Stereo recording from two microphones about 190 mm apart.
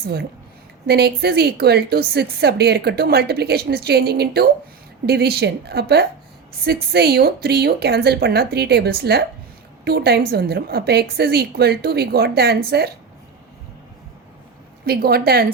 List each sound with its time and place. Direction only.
0.9 s a woman's voice: 55° right (ahead or behind)
14.8 s a woman's voice: 55° right (ahead or behind)